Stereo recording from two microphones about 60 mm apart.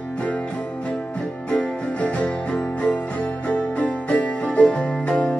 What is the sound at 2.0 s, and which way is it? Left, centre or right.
Music, left.